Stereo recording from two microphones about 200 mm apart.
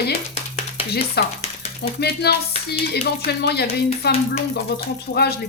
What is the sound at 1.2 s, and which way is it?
Speech, 55° left (ahead or behind).